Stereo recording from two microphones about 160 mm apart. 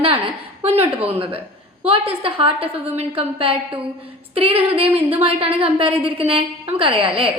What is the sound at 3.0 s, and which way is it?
A woman's voice, 35° right (ahead or behind).